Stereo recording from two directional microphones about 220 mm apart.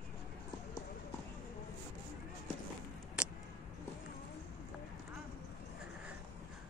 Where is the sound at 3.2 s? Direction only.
5° right (ahead or behind).